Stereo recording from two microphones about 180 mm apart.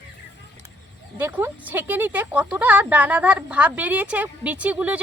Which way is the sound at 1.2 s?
10° right (ahead or behind).